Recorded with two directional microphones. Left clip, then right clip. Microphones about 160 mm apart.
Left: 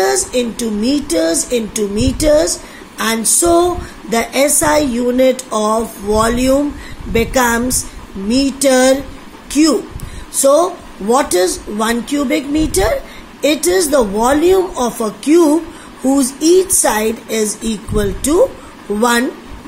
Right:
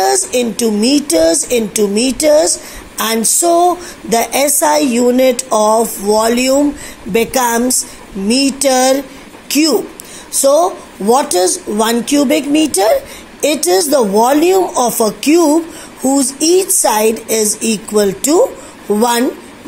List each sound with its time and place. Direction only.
0.3 s speech: 30° right (ahead or behind)